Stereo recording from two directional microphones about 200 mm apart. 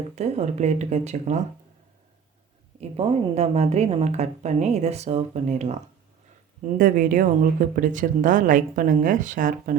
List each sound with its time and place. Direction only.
0.2 s speech: 35° right (ahead or behind)
3.0 s speech: 30° right (ahead or behind)